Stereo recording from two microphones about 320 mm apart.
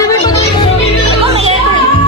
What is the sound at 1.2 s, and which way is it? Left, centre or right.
Music, centre.